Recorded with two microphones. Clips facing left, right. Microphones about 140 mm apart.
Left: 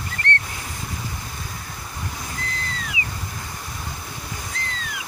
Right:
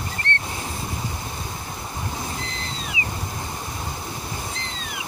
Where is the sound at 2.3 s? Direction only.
25° right (ahead or behind).